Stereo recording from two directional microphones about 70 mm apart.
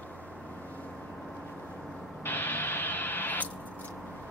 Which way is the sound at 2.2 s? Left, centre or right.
Left.